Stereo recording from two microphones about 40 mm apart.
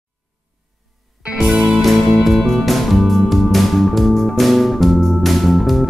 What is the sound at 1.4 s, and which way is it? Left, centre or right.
Music, right.